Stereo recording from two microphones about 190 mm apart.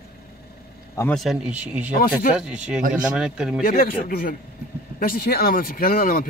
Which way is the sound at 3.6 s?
50° left (ahead or behind).